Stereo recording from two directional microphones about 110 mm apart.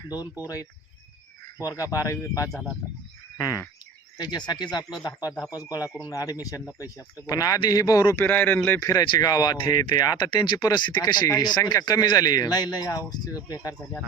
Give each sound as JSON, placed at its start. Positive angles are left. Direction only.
{"t": 0.4, "sound": "speech", "side_deg": 35}
{"t": 8.2, "sound": "speech", "side_deg": 15}
{"t": 8.8, "sound": "speech", "side_deg": 30}
{"t": 10.6, "sound": "speech", "side_deg": 30}
{"t": 10.8, "sound": "speech", "side_deg": 40}